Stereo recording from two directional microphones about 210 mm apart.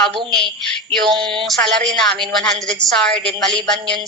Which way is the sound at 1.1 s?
25° right (ahead or behind).